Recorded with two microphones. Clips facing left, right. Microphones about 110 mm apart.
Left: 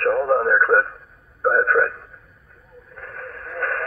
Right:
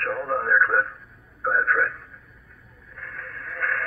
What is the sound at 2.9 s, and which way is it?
Radio, 40° left (ahead or behind).